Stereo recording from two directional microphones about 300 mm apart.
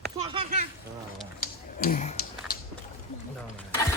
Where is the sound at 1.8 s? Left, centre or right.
Left.